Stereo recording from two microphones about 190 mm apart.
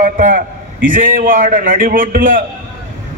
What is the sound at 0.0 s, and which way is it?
A man's voice, 45° right (ahead or behind).